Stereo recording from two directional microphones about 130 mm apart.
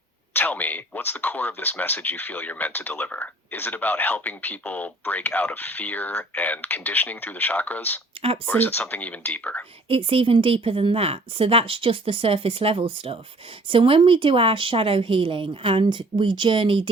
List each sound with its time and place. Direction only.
0.3 s speech: 15° left (ahead or behind)
9.9 s a woman's voice: 45° right (ahead or behind)